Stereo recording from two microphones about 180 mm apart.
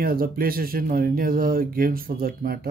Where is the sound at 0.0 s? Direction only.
55° right (ahead or behind).